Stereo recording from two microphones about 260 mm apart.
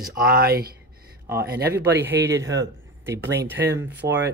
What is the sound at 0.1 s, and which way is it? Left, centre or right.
Speech, right.